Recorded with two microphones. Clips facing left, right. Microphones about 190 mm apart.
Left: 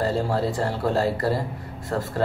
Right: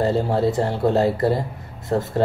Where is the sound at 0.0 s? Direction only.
20° right (ahead or behind).